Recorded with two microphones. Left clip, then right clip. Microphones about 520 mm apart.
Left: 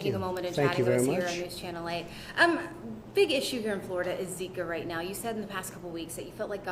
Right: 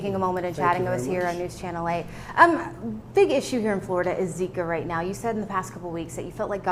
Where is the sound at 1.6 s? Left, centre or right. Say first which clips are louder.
Right 7 dB; right.